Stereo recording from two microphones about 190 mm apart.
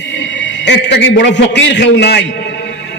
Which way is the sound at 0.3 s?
70° left (ahead or behind).